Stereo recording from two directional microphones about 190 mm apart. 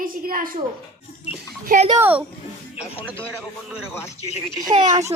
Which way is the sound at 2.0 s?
10° right (ahead or behind).